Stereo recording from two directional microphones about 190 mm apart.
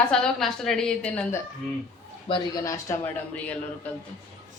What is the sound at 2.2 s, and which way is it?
Speech, 25° left (ahead or behind).